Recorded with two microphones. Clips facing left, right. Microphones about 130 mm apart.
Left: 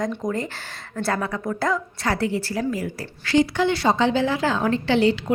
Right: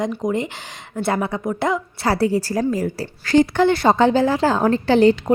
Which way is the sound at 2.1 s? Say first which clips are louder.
Right 6 dB; 35° right (ahead or behind).